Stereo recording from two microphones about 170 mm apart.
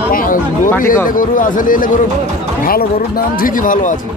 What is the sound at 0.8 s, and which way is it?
Speech, 55° left (ahead or behind).